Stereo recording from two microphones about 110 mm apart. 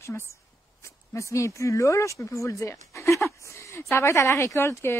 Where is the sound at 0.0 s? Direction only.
25° left (ahead or behind).